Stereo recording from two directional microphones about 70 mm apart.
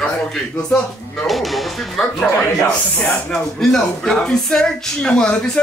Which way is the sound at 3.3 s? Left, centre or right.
Centre.